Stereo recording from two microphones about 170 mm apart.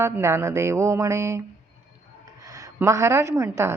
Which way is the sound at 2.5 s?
20° right (ahead or behind).